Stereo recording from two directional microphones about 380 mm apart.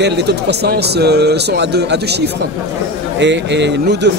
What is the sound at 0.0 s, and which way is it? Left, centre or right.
Speech, right.